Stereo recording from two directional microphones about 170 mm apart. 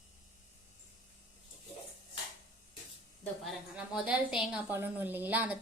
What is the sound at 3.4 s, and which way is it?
A woman's voice, centre (ahead or behind).